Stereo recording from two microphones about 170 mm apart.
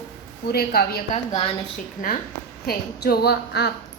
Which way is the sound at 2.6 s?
65° left (ahead or behind).